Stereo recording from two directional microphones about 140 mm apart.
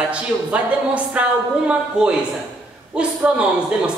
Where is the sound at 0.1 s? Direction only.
10° right (ahead or behind).